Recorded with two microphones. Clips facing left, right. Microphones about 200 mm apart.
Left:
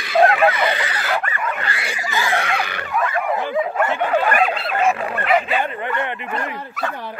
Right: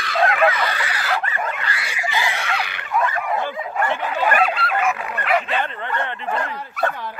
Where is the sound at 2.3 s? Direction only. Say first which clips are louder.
Left 4 dB; 50° left (ahead or behind).